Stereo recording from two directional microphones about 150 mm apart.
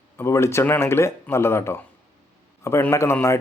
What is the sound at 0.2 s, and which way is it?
Speech, 20° left (ahead or behind).